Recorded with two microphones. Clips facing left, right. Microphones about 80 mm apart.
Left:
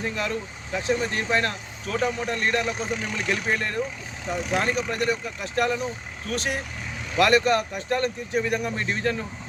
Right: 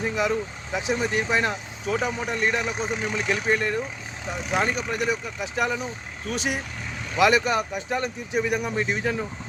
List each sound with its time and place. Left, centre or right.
0.0 s speech: centre
2.7 s speech: centre
3.2 s speech: centre